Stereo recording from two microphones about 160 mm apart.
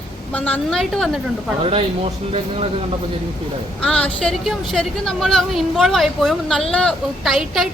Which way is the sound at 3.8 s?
5° left (ahead or behind).